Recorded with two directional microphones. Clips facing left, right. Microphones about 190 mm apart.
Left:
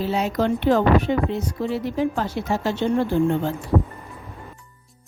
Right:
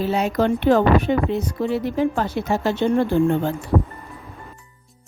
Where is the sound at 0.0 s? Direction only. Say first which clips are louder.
Right 2 dB; 55° right (ahead or behind).